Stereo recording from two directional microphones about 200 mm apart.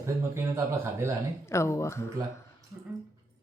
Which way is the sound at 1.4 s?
15° left (ahead or behind).